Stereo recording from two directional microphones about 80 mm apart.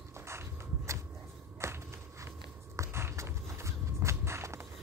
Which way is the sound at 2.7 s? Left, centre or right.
Right.